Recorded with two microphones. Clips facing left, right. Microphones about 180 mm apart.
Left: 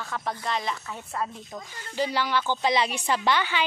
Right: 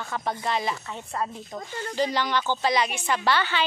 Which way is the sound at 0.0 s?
Centre (ahead or behind).